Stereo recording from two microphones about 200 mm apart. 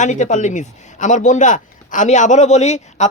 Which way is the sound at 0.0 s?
35° left (ahead or behind).